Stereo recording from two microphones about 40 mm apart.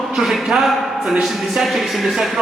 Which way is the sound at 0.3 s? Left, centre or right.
Centre.